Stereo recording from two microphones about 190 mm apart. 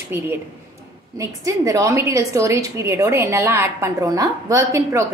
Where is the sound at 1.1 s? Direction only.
15° right (ahead or behind).